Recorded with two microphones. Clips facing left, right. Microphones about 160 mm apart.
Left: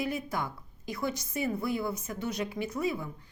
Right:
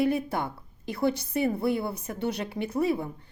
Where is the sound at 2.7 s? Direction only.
30° right (ahead or behind).